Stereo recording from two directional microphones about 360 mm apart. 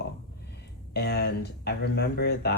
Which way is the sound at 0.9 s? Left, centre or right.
Left.